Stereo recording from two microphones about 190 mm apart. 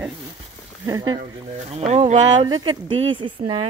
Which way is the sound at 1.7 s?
35° right (ahead or behind).